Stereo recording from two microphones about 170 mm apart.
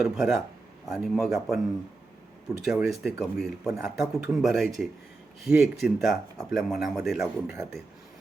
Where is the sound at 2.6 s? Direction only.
Centre (ahead or behind).